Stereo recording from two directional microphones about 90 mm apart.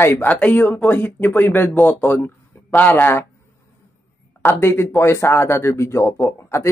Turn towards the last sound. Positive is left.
turn(degrees=30)  # may be behind; listen again after turning